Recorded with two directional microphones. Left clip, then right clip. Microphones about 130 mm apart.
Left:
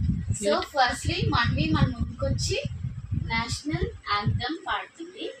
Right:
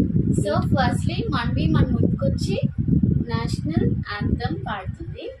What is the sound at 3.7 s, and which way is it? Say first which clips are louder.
Speech: right 5 dB; 25° right (ahead or behind).